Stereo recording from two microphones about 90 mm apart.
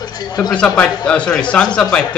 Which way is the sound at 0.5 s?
10° left (ahead or behind).